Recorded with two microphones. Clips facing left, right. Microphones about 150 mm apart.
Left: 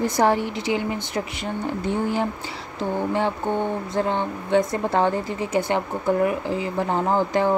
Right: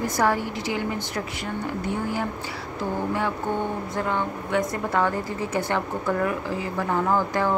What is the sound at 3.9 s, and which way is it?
Speech, 30° left (ahead or behind).